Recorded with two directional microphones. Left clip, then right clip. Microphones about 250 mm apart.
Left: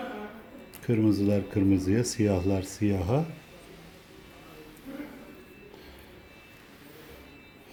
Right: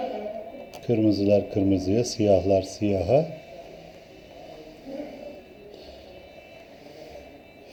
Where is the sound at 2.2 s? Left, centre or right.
Left.